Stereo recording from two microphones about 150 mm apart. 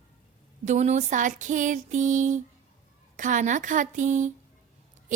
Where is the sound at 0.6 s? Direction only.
50° right (ahead or behind).